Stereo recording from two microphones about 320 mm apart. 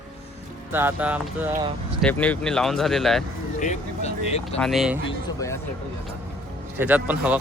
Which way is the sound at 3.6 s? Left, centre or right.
Centre.